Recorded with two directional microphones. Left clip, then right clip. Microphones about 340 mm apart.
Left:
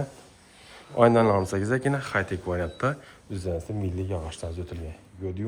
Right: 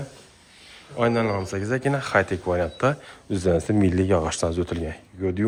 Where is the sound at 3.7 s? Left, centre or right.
Right.